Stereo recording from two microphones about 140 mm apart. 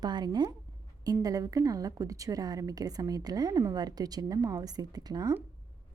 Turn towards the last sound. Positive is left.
turn(degrees=-30)  # may be behind; listen again after turning